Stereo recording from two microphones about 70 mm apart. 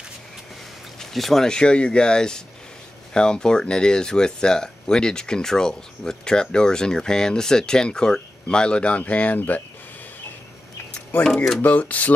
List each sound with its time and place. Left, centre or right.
0.9 s speech: centre; by 9.6 s left
11.2 s speech: centre
11.6 s speech: left